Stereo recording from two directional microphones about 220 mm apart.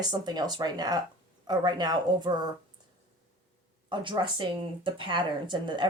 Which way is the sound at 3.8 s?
20° right (ahead or behind).